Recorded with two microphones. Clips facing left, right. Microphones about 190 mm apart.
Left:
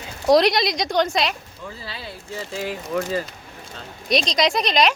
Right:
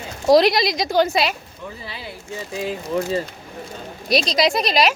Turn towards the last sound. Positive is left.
turn(degrees=-5)  # may be behind; listen again after turning